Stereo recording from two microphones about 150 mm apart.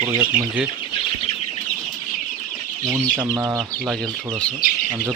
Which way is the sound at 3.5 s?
Centre (ahead or behind).